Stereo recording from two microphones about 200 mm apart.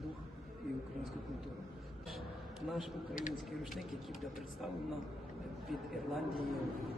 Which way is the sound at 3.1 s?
40° left (ahead or behind).